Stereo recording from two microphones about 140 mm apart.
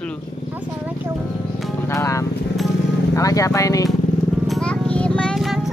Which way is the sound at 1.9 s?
20° left (ahead or behind).